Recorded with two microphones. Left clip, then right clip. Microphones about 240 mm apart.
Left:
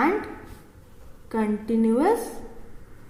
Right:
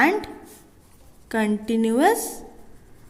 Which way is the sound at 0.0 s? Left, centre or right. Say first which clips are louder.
Right 3 dB; right.